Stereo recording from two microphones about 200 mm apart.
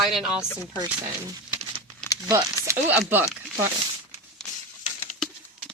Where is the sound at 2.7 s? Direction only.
10° right (ahead or behind).